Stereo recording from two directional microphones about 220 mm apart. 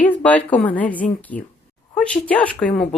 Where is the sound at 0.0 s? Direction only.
5° left (ahead or behind).